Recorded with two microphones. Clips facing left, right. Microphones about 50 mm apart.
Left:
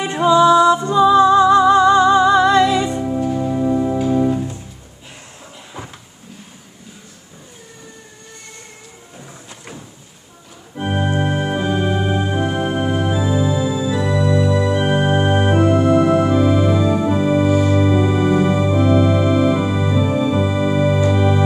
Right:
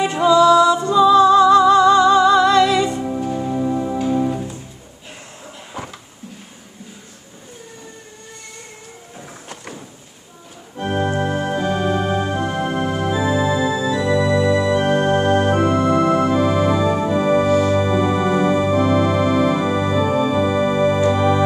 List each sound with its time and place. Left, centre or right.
0.0 s music: left
3.0 s music: centre
10.8 s organ: centre
13.1 s organ: centre
14.7 s music: centre
15.5 s organ: centre
18.3 s music: centre
20.2 s organ: centre
21.1 s music: centre